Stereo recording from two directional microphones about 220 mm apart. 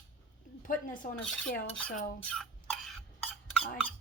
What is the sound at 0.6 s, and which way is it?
A child's voice, 35° left (ahead or behind).